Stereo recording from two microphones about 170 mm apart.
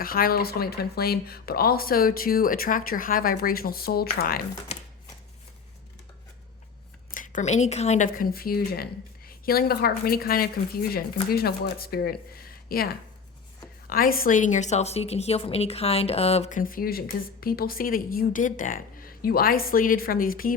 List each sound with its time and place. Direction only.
0.0 s a woman's voice: 60° left (ahead or behind)
7.1 s a woman's voice: 50° left (ahead or behind)